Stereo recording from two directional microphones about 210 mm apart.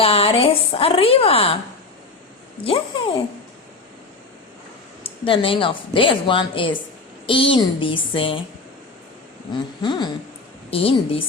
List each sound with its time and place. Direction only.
0.0 s a woman's voice: 25° left (ahead or behind)
2.6 s a woman's voice: 25° left (ahead or behind)
5.2 s a woman's voice: 25° left (ahead or behind)
9.8 s a woman's voice: 20° left (ahead or behind)